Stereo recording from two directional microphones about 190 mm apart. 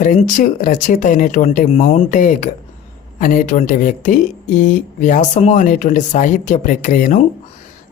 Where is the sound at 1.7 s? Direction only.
30° left (ahead or behind).